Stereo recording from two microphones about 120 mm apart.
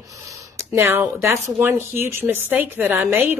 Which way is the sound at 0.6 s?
20° right (ahead or behind).